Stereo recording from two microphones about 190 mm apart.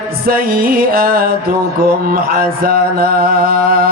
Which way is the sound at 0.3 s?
50° right (ahead or behind).